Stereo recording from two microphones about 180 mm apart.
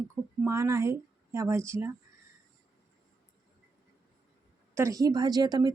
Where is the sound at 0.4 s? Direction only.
15° right (ahead or behind).